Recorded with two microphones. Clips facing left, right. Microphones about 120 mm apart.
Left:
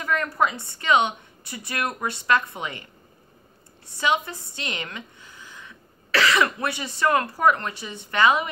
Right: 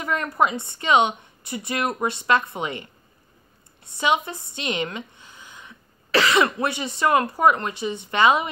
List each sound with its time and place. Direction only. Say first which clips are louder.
0.0 s a woman's voice: right 1 dB; 20° right (ahead or behind)
4.0 s a woman's voice: right 2 dB; 20° right (ahead or behind)